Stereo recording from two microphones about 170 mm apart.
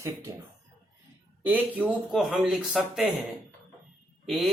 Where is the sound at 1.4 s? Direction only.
10° right (ahead or behind).